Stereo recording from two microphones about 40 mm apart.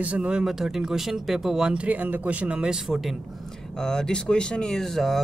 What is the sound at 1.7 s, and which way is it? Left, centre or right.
Speech, right.